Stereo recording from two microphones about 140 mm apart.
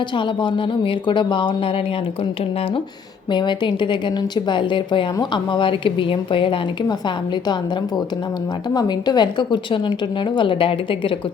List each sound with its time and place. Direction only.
1.0 s speech: 35° left (ahead or behind)
3.3 s speech: 35° left (ahead or behind)
8.7 s speech: 30° left (ahead or behind)